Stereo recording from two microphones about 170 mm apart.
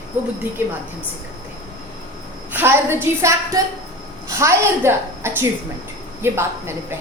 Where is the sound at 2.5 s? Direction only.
10° right (ahead or behind).